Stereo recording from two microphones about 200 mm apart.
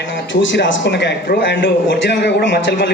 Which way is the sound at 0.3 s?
70° left (ahead or behind).